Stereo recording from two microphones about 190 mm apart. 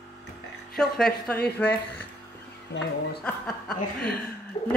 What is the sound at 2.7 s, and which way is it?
Speech, 65° left (ahead or behind).